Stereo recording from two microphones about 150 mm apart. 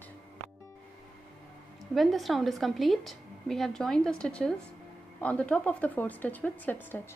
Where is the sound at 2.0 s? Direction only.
Centre (ahead or behind).